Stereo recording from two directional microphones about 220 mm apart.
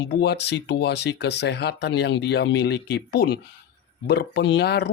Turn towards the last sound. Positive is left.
turn(degrees=50)  # may be behind; listen again after turning